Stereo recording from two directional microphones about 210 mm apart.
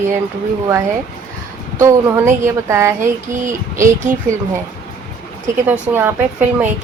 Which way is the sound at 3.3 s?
35° right (ahead or behind).